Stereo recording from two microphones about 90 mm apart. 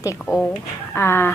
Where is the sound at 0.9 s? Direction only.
25° left (ahead or behind).